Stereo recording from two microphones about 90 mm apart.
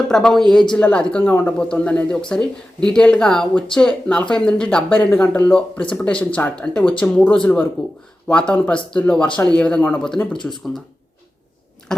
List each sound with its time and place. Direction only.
0.1 s a man's voice: 5° left (ahead or behind)
1.5 s speech: 10° left (ahead or behind)
11.9 s a sound: 5° left (ahead or behind)